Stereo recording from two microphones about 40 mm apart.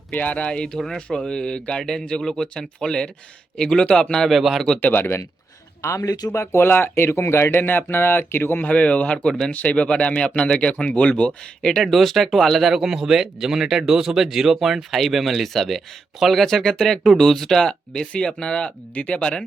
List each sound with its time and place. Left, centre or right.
0.1 s speech: left; by 4.0 s centre
4.3 s speech: centre
4.8 s speech: left
6.0 s speech: left
8.6 s speech: left
11.8 s speech: centre
12.7 s speech: centre; by 19.4 s left